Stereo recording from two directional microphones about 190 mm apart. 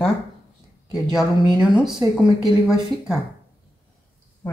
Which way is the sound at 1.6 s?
5° right (ahead or behind).